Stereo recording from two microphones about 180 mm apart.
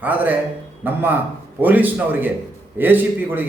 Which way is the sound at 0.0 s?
10° right (ahead or behind).